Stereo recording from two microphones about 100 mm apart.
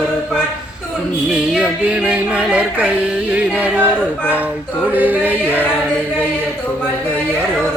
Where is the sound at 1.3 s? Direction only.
10° right (ahead or behind).